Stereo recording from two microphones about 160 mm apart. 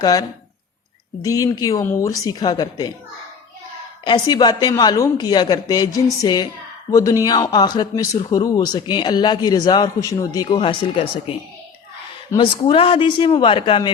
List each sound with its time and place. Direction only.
0.0 s speech: 20° left (ahead or behind)
4.0 s speech: 25° left (ahead or behind)
12.4 s a man's voice: 30° left (ahead or behind)